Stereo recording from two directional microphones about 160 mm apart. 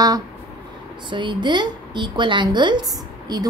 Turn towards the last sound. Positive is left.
turn(degrees=-25)  # may be behind; listen again after turning